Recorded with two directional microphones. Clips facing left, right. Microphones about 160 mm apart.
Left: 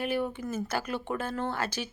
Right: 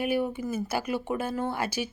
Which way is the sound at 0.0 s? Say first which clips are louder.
Right 3 dB; 10° right (ahead or behind).